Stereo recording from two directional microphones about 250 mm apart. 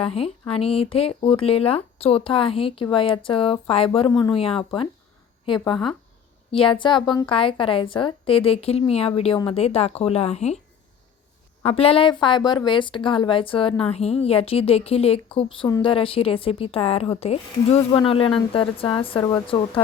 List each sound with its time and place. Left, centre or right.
0.0 s a woman's voice: left
11.6 s a woman's voice: left